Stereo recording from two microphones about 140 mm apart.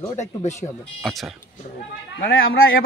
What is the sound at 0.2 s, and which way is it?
Speech, 55° left (ahead or behind).